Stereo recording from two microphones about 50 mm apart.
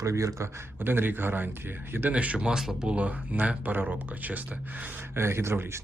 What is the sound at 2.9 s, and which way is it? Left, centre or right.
Speech, right.